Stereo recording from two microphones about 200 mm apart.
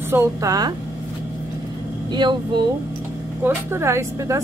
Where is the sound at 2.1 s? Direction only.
20° right (ahead or behind).